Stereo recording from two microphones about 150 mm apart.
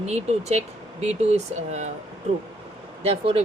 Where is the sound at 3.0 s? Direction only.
40° right (ahead or behind).